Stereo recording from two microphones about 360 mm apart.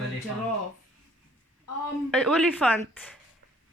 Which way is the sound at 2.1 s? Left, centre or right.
Centre.